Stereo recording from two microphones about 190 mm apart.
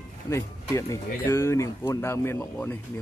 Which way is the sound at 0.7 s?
15° left (ahead or behind).